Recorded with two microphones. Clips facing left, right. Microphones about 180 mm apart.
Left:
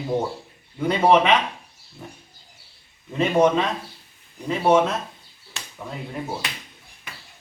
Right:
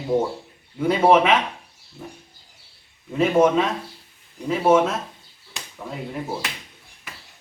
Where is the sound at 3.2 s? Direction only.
5° right (ahead or behind).